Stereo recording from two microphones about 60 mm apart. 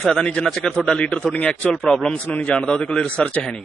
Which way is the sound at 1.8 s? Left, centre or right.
Centre.